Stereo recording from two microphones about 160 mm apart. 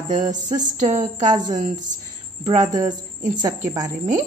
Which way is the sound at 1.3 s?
25° right (ahead or behind).